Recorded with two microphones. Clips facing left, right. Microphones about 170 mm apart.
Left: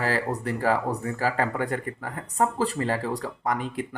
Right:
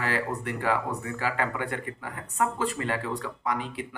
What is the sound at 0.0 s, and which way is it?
Speech, 40° left (ahead or behind).